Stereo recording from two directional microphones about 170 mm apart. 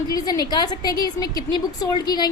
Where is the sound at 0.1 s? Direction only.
20° left (ahead or behind).